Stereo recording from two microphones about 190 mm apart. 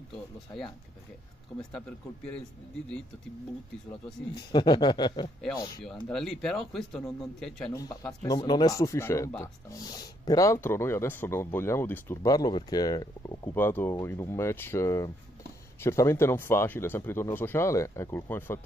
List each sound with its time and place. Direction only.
4.4 s speech: 20° left (ahead or behind)
6.0 s speech: 5° left (ahead or behind)
8.0 s speech: 15° left (ahead or behind)